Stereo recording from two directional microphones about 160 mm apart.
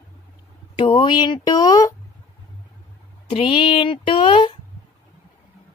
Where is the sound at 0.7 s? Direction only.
30° left (ahead or behind).